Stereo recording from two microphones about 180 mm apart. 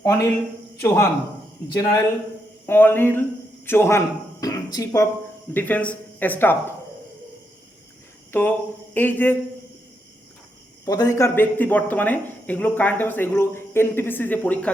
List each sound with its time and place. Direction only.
0.0 s speech: 15° left (ahead or behind)
8.3 s speech: 10° left (ahead or behind)
10.8 s speech: 20° left (ahead or behind)